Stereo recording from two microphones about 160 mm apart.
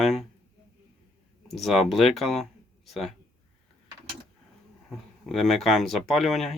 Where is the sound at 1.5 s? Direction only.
Centre (ahead or behind).